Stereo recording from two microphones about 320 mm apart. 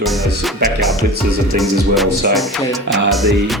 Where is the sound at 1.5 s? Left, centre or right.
Centre.